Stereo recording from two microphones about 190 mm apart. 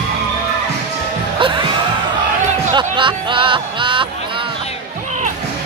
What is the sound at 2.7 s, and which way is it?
Music, 25° right (ahead or behind).